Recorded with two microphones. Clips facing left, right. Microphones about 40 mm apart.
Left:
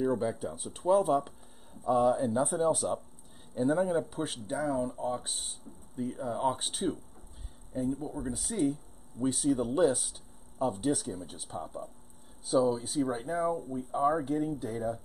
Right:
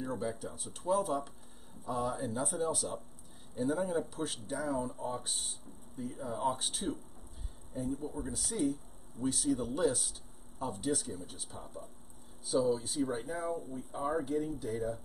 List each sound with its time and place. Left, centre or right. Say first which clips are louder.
0.0 s speech: left 7 dB; centre
11.0 s speech: left 4 dB; centre